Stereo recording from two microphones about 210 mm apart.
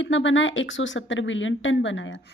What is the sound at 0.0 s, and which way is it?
A woman's voice, 60° left (ahead or behind).